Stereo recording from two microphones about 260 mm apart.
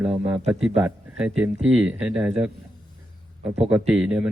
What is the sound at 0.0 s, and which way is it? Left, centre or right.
A man's voice, centre.